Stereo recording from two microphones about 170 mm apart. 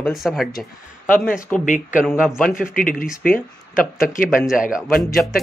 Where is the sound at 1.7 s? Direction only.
50° left (ahead or behind).